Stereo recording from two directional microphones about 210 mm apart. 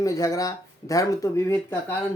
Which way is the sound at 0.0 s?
15° left (ahead or behind).